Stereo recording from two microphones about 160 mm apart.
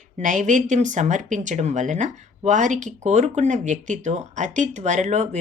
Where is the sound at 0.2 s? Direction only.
50° right (ahead or behind).